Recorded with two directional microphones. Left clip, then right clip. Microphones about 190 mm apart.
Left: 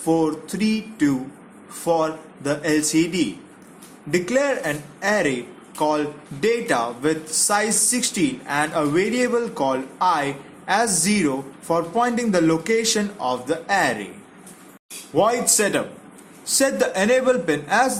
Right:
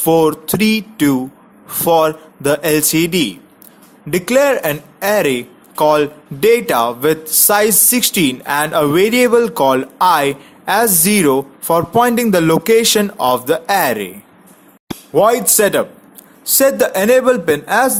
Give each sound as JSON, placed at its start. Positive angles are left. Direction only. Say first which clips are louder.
{"t": 0.0, "sound": "speech", "louder": "right 9 dB", "side_deg": -45}
{"t": 15.1, "sound": "speech", "louder": "right 7 dB", "side_deg": -40}